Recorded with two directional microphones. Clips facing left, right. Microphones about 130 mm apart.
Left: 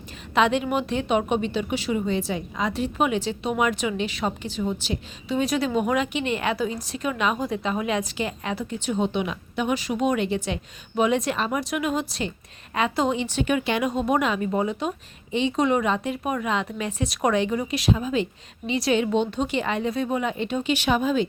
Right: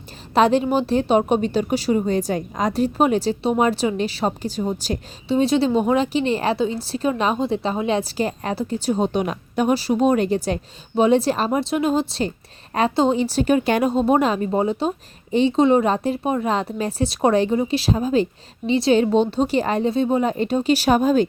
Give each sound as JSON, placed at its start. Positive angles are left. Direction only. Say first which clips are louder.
{"t": 0.3, "sound": "a woman's voice", "louder": "right 5 dB", "side_deg": -35}